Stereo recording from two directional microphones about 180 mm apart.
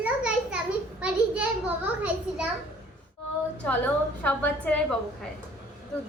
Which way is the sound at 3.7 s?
10° left (ahead or behind).